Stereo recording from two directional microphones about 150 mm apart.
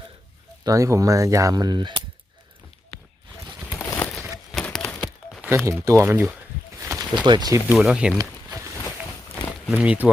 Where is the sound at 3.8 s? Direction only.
10° left (ahead or behind).